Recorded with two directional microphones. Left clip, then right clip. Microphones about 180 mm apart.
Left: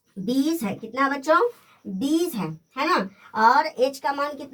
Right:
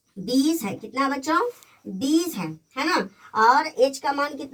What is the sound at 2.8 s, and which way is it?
Speech, 15° right (ahead or behind).